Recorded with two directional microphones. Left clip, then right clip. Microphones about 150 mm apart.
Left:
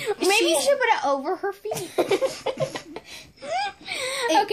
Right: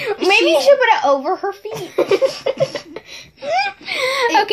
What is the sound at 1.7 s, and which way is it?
Speech, 55° left (ahead or behind).